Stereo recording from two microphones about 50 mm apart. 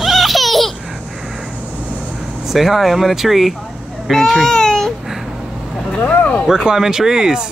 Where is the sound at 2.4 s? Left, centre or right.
Centre.